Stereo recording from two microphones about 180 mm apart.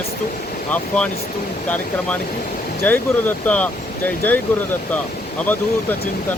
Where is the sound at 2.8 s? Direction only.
10° left (ahead or behind).